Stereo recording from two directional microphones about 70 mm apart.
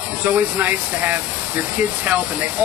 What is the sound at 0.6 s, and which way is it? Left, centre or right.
Speech, right.